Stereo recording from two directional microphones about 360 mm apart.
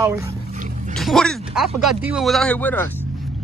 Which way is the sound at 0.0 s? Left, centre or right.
Centre.